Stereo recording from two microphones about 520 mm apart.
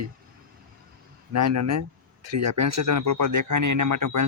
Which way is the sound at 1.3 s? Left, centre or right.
Right.